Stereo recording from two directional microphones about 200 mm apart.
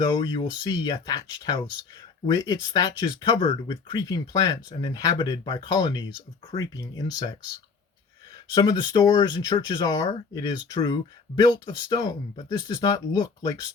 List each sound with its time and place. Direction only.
0.0 s speech: 20° left (ahead or behind)
8.5 s speech: 20° left (ahead or behind)